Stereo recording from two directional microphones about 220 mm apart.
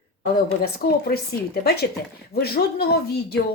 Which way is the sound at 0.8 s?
45° left (ahead or behind).